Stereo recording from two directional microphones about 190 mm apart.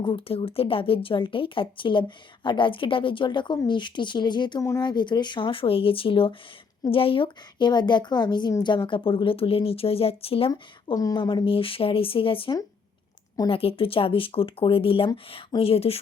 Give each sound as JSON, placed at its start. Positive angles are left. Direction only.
{"t": 0.0, "sound": "speech", "side_deg": 25}